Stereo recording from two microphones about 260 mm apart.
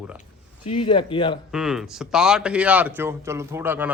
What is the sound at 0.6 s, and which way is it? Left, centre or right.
Speech, centre.